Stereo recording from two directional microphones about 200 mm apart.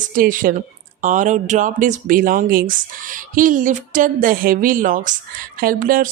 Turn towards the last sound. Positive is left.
turn(degrees=-45)  # may be behind; listen again after turning